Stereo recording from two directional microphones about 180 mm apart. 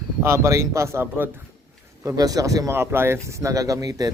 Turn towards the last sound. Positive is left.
turn(degrees=-20)  # may be behind; listen again after turning